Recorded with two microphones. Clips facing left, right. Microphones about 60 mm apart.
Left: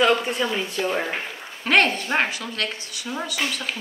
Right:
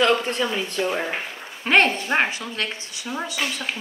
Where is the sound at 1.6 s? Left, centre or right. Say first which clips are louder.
Right 1 dB; right.